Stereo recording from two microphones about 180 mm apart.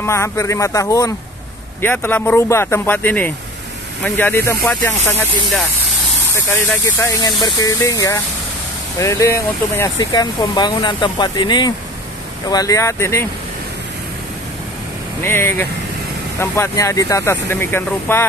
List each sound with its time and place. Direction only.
0.0 s speech: 15° left (ahead or behind)
7.0 s speech: 20° left (ahead or behind)
15.2 s speech: 15° left (ahead or behind)